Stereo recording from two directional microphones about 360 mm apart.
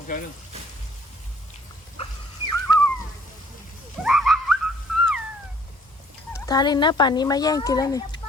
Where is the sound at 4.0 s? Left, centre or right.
Centre.